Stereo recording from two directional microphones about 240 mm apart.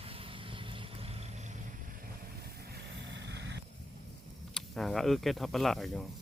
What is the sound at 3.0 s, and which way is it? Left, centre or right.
Vehicle, right.